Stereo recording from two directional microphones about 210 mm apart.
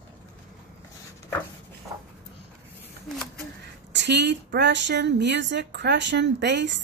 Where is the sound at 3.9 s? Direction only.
55° right (ahead or behind).